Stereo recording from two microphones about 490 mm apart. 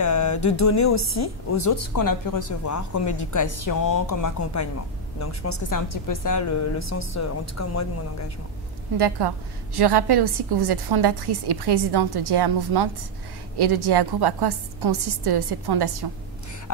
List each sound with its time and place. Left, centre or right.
0.0 s a woman's voice: left
8.9 s a woman's voice: right